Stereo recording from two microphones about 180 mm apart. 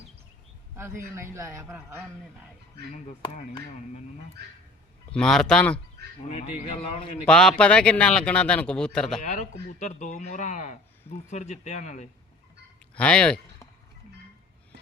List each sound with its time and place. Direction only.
0.8 s a man's voice: 15° right (ahead or behind)
5.1 s a man's voice: 5° left (ahead or behind)
6.2 s speech: 40° left (ahead or behind)
7.3 s a man's voice: 5° left (ahead or behind)
9.2 s speech: 40° left (ahead or behind)
13.0 s speech: 5° left (ahead or behind)